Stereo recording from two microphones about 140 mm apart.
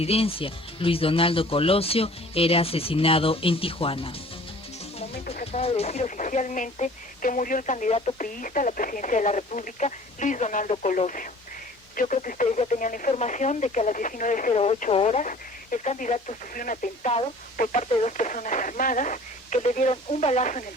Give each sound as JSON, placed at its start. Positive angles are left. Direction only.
{"t": 0.0, "sound": "speech", "side_deg": 45}
{"t": 5.5, "sound": "speech", "side_deg": 45}
{"t": 8.2, "sound": "speech", "side_deg": 70}
{"t": 13.1, "sound": "speech", "side_deg": 60}
{"t": 14.5, "sound": "speech", "side_deg": 50}
{"t": 17.6, "sound": "speech", "side_deg": 60}
{"t": 19.9, "sound": "speech", "side_deg": 50}